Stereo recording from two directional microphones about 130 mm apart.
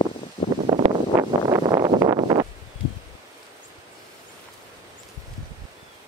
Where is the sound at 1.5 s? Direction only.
30° right (ahead or behind).